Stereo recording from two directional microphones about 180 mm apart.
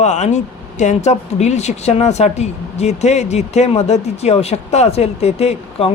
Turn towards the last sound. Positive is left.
turn(degrees=35)  # may be behind; listen again after turning